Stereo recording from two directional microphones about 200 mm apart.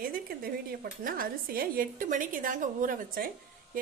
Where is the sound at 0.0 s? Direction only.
45° right (ahead or behind).